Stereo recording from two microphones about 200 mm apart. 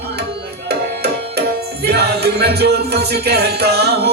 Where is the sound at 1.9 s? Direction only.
55° right (ahead or behind).